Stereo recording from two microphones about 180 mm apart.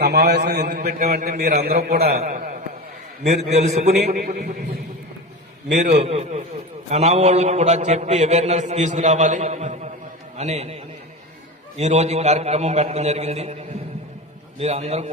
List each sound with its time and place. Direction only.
0.0 s a man's voice: 65° right (ahead or behind)
0.8 s a man's voice: 45° right (ahead or behind)
2.2 s carnatic music: 40° right (ahead or behind)
3.5 s a man's voice: 40° right (ahead or behind)
3.9 s a man's voice: 60° right (ahead or behind)
6.0 s a man's voice: 35° right (ahead or behind)